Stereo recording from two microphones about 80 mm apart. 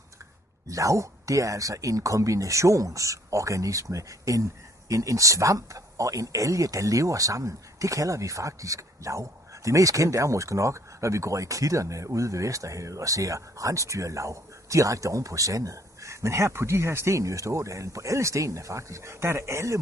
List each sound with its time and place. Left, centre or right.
0.7 s speech: right